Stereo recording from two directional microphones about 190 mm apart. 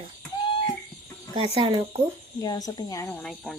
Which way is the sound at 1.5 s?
25° right (ahead or behind).